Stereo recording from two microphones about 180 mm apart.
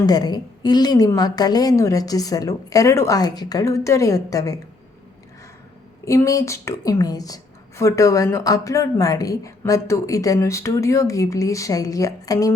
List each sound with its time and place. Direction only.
0.0 s a woman's voice: 20° left (ahead or behind)
6.1 s a woman's voice: 15° left (ahead or behind)